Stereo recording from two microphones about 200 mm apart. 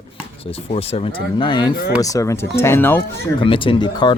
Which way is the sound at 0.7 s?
30° left (ahead or behind).